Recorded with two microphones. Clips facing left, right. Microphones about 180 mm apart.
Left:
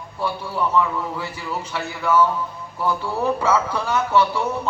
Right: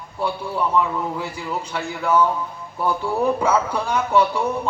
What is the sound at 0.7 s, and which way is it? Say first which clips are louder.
A man's voice: even; 15° right (ahead or behind).